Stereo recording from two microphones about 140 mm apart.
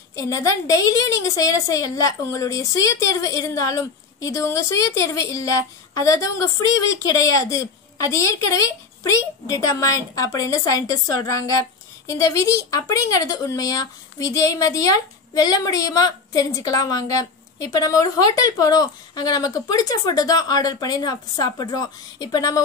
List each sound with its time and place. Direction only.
0.1 s a woman's voice: 25° left (ahead or behind)